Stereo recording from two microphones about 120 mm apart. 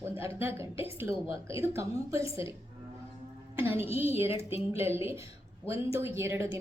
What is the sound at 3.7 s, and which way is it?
Speech, 55° left (ahead or behind).